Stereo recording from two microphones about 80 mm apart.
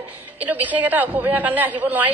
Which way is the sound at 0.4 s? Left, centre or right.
Right.